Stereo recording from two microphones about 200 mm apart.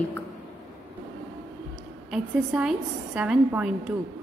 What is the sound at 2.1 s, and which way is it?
A woman's voice, 5° right (ahead or behind).